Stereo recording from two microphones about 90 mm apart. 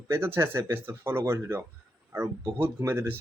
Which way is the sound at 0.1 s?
25° right (ahead or behind).